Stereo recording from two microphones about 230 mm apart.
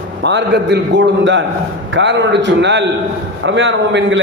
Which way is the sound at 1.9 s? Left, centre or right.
Right.